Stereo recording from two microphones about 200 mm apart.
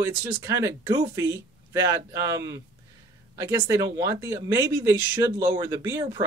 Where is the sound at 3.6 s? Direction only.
15° right (ahead or behind).